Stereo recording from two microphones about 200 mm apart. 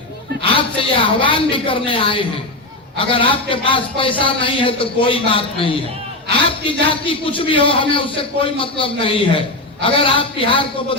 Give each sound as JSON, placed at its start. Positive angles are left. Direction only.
{"t": 0.8, "sound": "a man's voice", "side_deg": 25}